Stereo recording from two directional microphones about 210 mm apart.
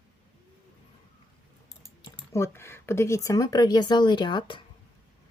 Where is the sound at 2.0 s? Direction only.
15° left (ahead or behind).